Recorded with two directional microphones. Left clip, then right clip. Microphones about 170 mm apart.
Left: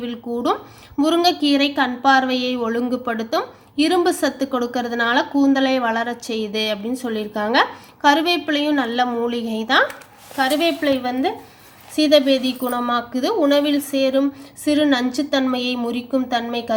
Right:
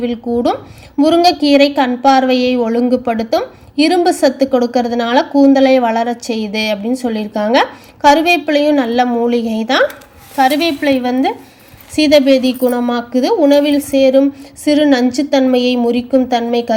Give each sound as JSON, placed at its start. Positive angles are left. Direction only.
{"t": 0.0, "sound": "a woman's voice", "side_deg": -15}